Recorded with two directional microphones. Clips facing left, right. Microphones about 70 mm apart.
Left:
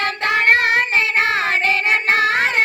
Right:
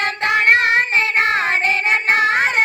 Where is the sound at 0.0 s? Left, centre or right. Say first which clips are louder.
Right 1 dB; right.